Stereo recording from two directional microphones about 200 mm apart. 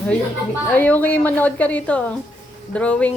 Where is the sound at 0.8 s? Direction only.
10° left (ahead or behind).